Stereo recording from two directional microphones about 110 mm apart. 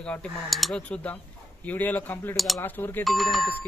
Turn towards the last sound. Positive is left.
turn(degrees=0)  # may be behind; listen again after turning